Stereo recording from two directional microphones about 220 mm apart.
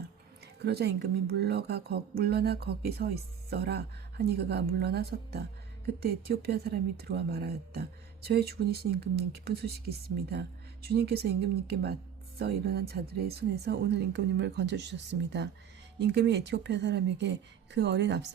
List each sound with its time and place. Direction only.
0.6 s a woman's voice: 45° right (ahead or behind)